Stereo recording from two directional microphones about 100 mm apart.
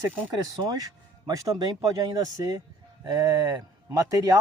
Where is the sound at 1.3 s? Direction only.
35° right (ahead or behind).